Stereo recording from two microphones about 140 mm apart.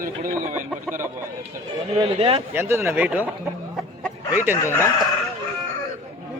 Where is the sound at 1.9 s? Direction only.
45° right (ahead or behind).